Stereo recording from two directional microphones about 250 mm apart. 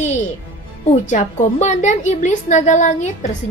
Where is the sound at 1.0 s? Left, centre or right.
Left.